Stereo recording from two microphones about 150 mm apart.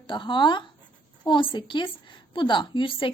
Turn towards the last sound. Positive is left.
turn(degrees=35)  # may be behind; listen again after turning